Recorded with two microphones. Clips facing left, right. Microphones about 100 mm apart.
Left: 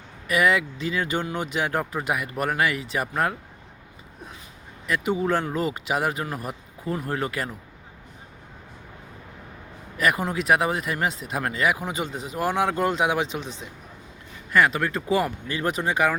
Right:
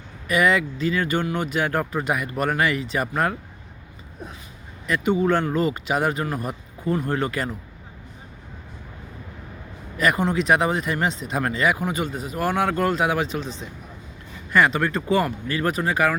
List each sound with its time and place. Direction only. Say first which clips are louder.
0.3 s speech: right 2 dB; 5° left (ahead or behind)
4.9 s speech: right 3 dB; 10° left (ahead or behind)
10.0 s speech: right 3 dB; 5° left (ahead or behind)
14.5 s speech: right 2 dB; centre (ahead or behind)
15.4 s speech: right 2 dB; 20° left (ahead or behind)